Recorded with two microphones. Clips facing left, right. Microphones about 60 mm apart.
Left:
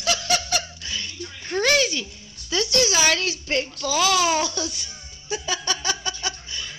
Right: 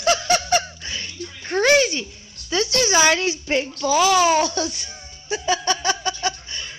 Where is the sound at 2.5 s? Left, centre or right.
Right.